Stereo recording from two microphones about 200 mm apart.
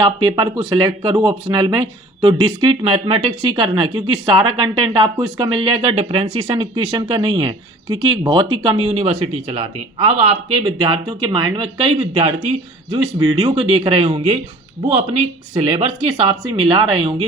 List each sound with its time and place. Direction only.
0.0 s speech: 20° right (ahead or behind)